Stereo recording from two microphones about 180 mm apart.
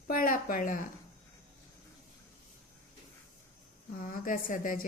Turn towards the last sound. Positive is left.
turn(degrees=50)  # may be behind; listen again after turning